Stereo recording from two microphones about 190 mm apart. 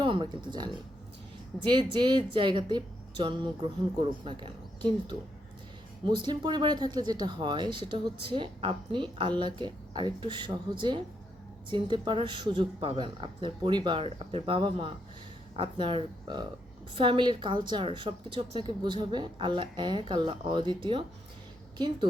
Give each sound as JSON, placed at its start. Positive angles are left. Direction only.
{"t": 0.0, "sound": "speech", "side_deg": -25}
{"t": 1.9, "sound": "speech", "side_deg": -25}